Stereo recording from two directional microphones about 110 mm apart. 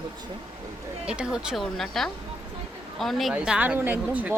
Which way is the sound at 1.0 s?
10° right (ahead or behind).